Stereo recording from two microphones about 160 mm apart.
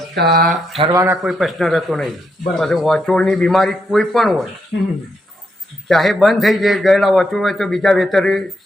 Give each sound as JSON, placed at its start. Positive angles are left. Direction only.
{"t": 0.1, "sound": "speech", "side_deg": -90}
{"t": 0.8, "sound": "speech", "side_deg": -20}
{"t": 1.2, "sound": "a man's voice", "side_deg": 0}
{"t": 5.9, "sound": "a man's voice", "side_deg": 0}